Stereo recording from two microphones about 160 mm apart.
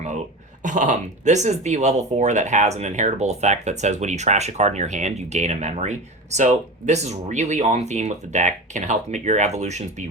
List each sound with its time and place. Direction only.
0.6 s speech: 50° right (ahead or behind)